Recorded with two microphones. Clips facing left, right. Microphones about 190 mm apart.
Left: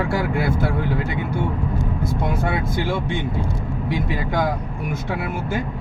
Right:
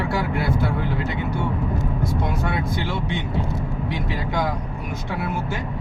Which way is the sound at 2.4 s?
50° left (ahead or behind).